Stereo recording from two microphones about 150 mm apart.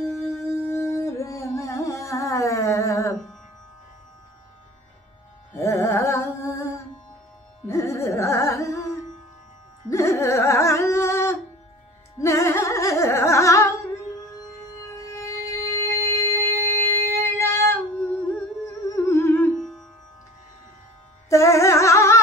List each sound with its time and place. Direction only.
0.0 s music: 20° left (ahead or behind)
5.5 s music: 20° left (ahead or behind)
9.8 s a sound: 20° left (ahead or behind)
12.2 s music: 20° left (ahead or behind)
15.0 s music: 20° left (ahead or behind)
19.5 s music: centre (ahead or behind)
21.3 s music: 20° left (ahead or behind)